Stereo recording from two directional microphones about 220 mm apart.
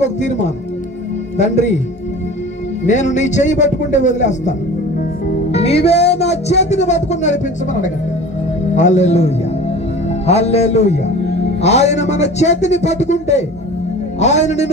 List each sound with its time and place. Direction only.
0.0 s a man's voice: 30° left (ahead or behind)
2.8 s a man's voice: 35° left (ahead or behind)
5.5 s music: 25° left (ahead or behind)
6.6 s a man's voice: 30° left (ahead or behind)
10.2 s music: 30° left (ahead or behind)
11.6 s a man's voice: 30° left (ahead or behind)